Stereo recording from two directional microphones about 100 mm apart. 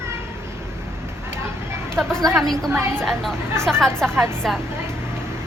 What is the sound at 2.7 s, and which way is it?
Speech, 25° right (ahead or behind).